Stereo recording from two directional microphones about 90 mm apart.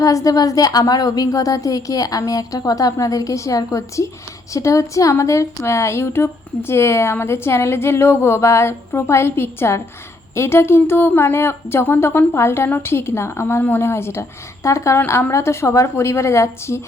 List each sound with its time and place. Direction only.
0.0 s a woman's voice: 40° left (ahead or behind)